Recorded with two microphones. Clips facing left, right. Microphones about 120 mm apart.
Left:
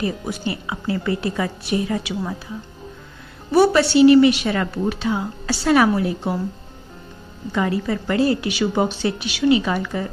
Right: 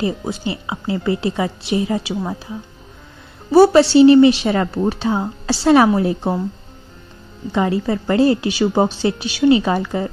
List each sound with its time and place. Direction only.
0.0 s a woman's voice: 25° right (ahead or behind)
3.5 s a woman's voice: 30° right (ahead or behind)
7.5 s a woman's voice: 25° right (ahead or behind)